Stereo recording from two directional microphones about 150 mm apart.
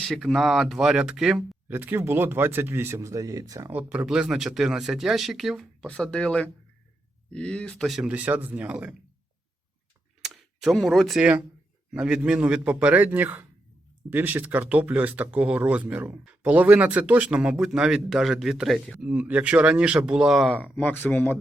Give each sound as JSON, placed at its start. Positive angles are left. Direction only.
{"t": 0.0, "sound": "speech", "side_deg": 0}
{"t": 10.2, "sound": "speech", "side_deg": 0}